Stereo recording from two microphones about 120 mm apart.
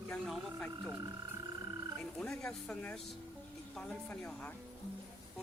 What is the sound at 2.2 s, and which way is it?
Speech, 5° left (ahead or behind).